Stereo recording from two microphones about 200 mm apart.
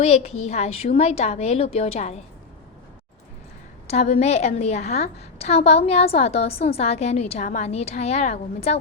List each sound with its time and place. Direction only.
0.0 s a woman's voice: 30° left (ahead or behind)
3.8 s a woman's voice: 30° left (ahead or behind)